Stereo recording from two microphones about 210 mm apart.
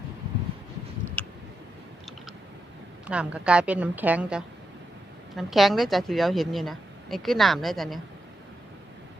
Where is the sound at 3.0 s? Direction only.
5° right (ahead or behind).